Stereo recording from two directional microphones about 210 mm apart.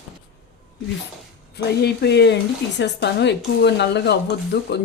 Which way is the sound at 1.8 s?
55° left (ahead or behind).